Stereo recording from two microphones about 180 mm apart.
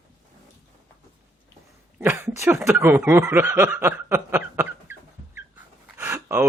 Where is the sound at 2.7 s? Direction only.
15° right (ahead or behind).